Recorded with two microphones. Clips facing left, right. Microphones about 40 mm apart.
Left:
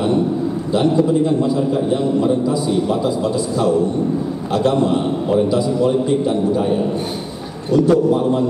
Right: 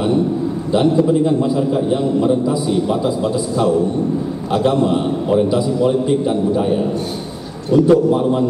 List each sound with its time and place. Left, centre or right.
0.7 s a man's voice: centre
4.5 s a man's voice: centre